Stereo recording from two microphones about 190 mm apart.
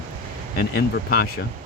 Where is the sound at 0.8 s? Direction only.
55° left (ahead or behind).